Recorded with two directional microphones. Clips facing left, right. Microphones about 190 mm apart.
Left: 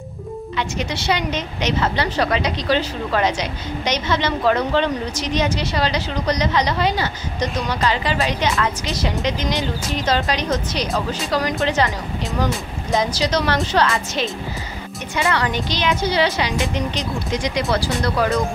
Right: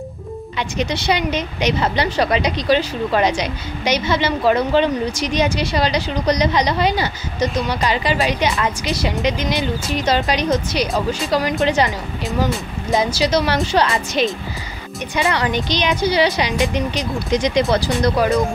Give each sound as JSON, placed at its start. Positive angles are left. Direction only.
{"t": 0.6, "sound": "a woman's voice", "side_deg": -20}
{"t": 12.9, "sound": "a woman's voice", "side_deg": -10}